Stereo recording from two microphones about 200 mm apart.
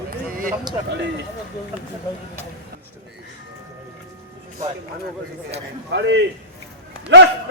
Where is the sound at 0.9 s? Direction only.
60° right (ahead or behind).